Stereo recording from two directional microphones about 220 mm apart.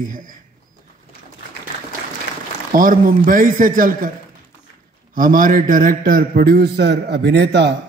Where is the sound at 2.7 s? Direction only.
40° right (ahead or behind).